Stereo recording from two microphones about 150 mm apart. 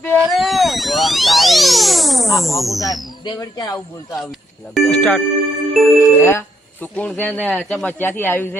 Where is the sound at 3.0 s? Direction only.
30° left (ahead or behind).